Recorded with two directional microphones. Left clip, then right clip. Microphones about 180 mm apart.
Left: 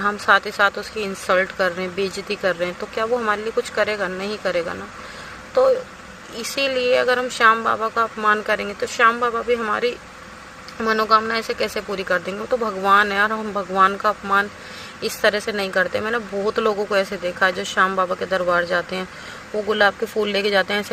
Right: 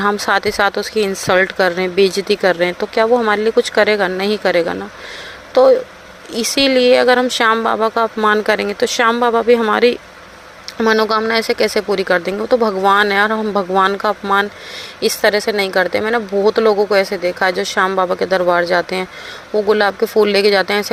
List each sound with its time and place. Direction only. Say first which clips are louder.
0.0 s speech: right 2 dB; 40° right (ahead or behind)
6.3 s speech: right 8 dB; 40° right (ahead or behind)